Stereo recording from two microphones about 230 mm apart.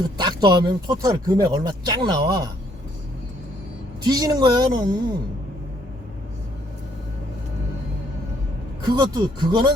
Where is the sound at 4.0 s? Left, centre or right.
Centre.